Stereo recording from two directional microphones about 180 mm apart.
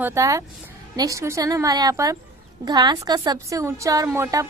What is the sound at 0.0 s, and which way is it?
A woman's voice, 15° right (ahead or behind).